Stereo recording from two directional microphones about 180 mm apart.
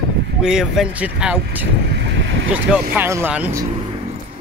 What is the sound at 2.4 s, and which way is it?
Speech, 5° right (ahead or behind).